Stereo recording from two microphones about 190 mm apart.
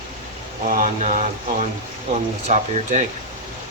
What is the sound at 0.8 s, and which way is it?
Speech, 45° right (ahead or behind).